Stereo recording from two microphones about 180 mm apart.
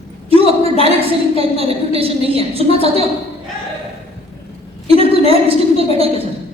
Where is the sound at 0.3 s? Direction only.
30° right (ahead or behind).